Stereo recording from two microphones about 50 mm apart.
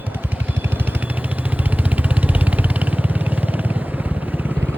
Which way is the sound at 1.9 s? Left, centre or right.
Right.